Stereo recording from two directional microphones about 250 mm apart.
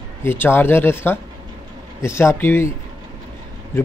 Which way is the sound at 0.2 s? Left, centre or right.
Centre.